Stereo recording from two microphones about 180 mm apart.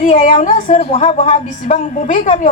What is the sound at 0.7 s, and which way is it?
A woman's voice, 35° left (ahead or behind).